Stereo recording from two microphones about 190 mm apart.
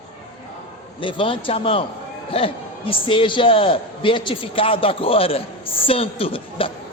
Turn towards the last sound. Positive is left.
turn(degrees=30)  # may be behind; listen again after turning